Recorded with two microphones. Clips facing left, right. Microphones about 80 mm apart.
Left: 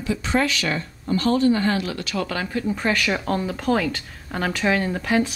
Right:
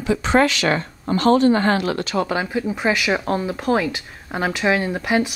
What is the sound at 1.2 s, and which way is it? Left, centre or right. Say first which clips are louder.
Speech: right 5 dB; right.